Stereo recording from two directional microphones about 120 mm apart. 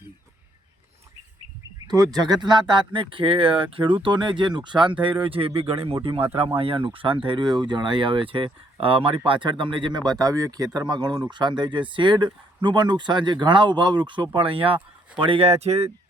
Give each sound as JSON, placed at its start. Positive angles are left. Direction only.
{"t": 1.8, "sound": "speech", "side_deg": -30}
{"t": 15.4, "sound": "speech", "side_deg": -60}